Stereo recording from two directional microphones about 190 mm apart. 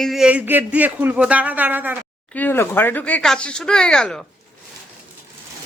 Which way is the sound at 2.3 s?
10° left (ahead or behind).